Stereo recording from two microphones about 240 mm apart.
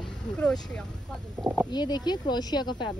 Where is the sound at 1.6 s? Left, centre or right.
Centre.